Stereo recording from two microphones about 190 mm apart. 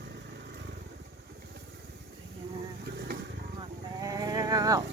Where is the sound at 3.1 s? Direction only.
55° right (ahead or behind).